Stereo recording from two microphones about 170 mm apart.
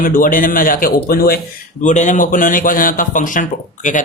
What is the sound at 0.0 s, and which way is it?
Speech, 55° left (ahead or behind).